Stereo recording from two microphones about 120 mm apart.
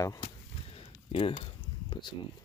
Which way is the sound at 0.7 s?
55° left (ahead or behind).